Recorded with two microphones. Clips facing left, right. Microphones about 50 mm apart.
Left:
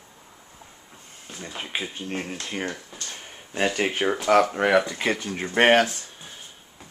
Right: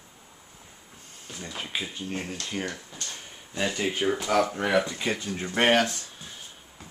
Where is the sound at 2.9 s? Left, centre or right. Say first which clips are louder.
Left 1 dB; left.